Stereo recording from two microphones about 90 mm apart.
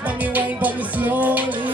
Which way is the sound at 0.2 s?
15° right (ahead or behind).